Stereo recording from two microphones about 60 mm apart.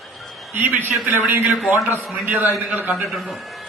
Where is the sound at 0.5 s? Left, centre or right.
Right.